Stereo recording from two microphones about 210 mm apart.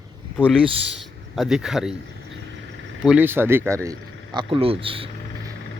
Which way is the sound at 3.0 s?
5° right (ahead or behind).